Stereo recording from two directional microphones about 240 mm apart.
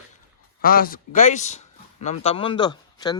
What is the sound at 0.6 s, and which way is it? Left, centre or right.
Speech, left.